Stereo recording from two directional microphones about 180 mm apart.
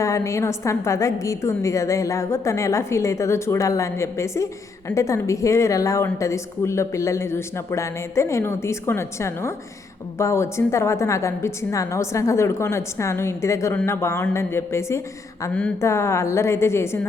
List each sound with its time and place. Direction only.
0.0 s a woman's voice: 15° left (ahead or behind)